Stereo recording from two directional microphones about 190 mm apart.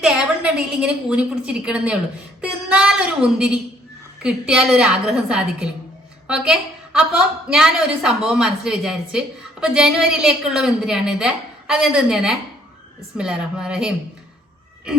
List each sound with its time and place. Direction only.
0.0 s a woman's voice: 5° right (ahead or behind)